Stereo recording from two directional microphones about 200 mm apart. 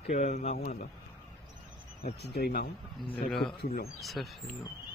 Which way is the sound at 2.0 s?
55° left (ahead or behind).